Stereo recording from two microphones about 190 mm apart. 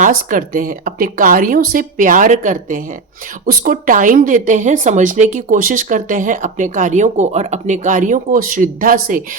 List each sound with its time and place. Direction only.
0.0 s a woman's voice: 45° right (ahead or behind)